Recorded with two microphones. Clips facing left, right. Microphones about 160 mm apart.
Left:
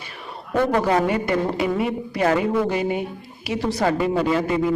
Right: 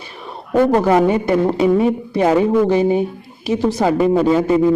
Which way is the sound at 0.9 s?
30° right (ahead or behind).